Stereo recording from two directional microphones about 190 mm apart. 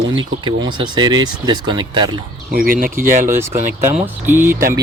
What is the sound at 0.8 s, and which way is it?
Speech, 25° right (ahead or behind).